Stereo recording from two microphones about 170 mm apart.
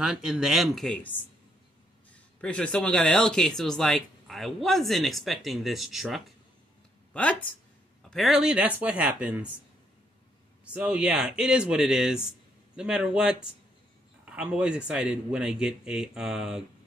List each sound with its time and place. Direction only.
0.0 s speech: 5° right (ahead or behind)
2.4 s speech: 5° left (ahead or behind)
10.6 s speech: 5° right (ahead or behind)